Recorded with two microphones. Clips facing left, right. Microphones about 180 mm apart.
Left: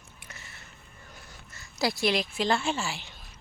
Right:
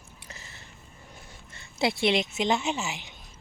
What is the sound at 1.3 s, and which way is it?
Speech, 25° right (ahead or behind).